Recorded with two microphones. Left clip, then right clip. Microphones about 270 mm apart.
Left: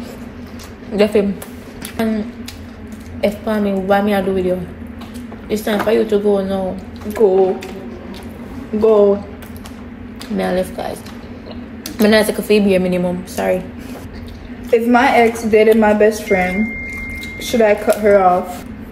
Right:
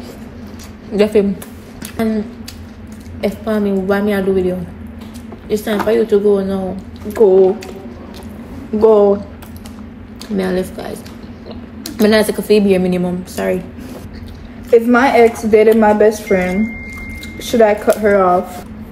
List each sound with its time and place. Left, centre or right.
0.9 s a woman's voice: centre
3.2 s a woman's voice: centre
5.5 s a woman's voice: centre
8.7 s a woman's voice: centre
10.3 s a woman's voice: centre
12.0 s a woman's voice: centre
14.7 s a woman's voice: centre